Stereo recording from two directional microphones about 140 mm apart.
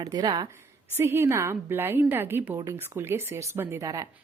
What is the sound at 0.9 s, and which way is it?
A woman's voice, 15° right (ahead or behind).